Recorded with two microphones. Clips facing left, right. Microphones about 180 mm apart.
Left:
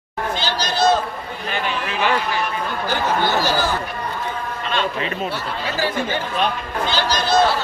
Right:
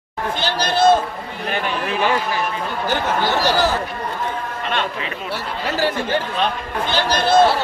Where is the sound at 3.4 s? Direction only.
75° right (ahead or behind).